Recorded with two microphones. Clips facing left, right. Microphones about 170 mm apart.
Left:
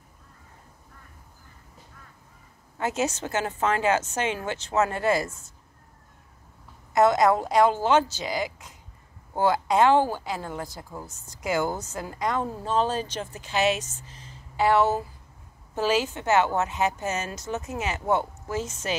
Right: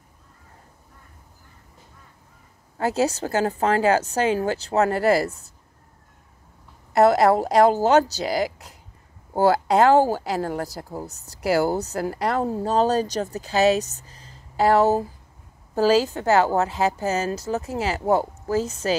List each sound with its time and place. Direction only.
2.8 s a woman's voice: 35° right (ahead or behind)
6.9 s a woman's voice: 35° right (ahead or behind)